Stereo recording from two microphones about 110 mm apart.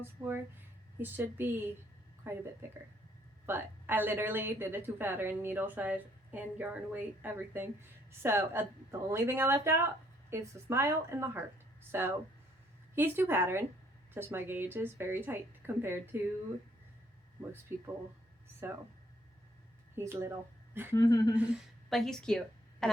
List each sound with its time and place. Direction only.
0.0 s a woman's voice: 20° right (ahead or behind)
17.7 s a woman's voice: 20° right (ahead or behind)
20.0 s a woman's voice: 25° right (ahead or behind)
20.9 s speech: 35° left (ahead or behind)
21.8 s speech: centre (ahead or behind)